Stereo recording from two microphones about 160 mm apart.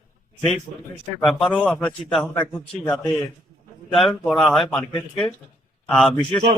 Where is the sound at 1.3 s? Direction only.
5° left (ahead or behind).